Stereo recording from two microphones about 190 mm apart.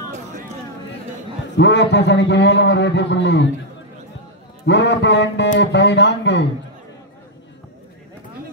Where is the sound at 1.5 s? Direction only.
65° left (ahead or behind).